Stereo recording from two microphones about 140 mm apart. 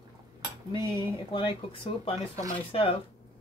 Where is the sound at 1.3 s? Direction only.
35° left (ahead or behind).